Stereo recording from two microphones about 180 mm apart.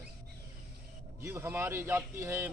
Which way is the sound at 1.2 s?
10° right (ahead or behind).